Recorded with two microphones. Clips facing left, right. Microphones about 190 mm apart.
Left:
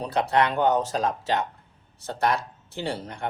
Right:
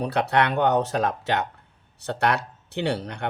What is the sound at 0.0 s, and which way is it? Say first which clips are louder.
Speech: right 1 dB; 60° right (ahead or behind).